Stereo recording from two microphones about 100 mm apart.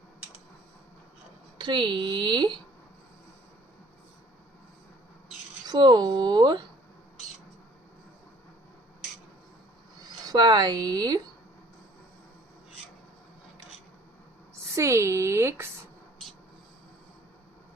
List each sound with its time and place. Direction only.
1.5 s a woman's voice: 50° right (ahead or behind)
5.6 s a woman's voice: 45° right (ahead or behind)
10.2 s speech: 45° right (ahead or behind)
14.8 s speech: 30° right (ahead or behind)